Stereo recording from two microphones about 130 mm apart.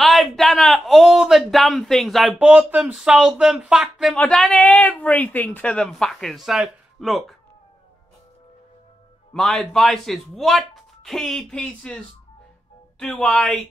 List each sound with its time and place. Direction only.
0.0 s speech: centre (ahead or behind)
4.7 s speech: 10° left (ahead or behind)
9.3 s speech: 5° left (ahead or behind)
13.0 s speech: 5° left (ahead or behind)